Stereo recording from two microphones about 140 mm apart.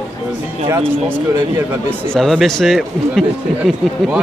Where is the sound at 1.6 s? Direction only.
15° right (ahead or behind).